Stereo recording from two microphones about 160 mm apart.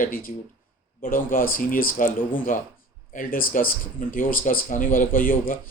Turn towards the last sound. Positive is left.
turn(degrees=60)  # may be behind; listen again after turning